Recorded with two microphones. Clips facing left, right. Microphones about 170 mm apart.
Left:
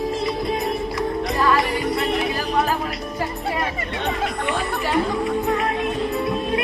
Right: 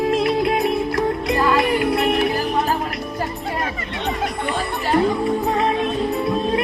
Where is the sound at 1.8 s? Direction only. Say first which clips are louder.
Right 4 dB; 65° right (ahead or behind).